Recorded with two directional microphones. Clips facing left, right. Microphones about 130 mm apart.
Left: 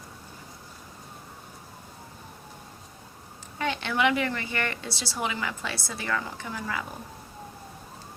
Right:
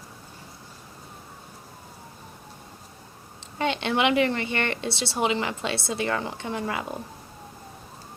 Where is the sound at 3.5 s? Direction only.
20° right (ahead or behind).